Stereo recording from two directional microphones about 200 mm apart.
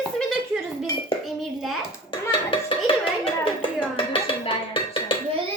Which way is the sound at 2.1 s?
25° left (ahead or behind).